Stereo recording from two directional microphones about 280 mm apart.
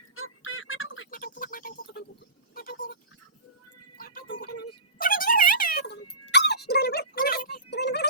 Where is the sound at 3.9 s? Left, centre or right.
Left.